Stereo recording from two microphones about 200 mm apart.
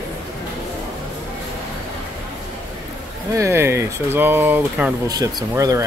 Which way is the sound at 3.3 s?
15° right (ahead or behind).